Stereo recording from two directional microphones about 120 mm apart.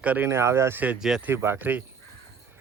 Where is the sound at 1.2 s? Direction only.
20° right (ahead or behind).